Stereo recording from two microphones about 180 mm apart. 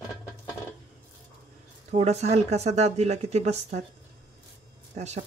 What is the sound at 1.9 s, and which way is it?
Speech, 35° right (ahead or behind).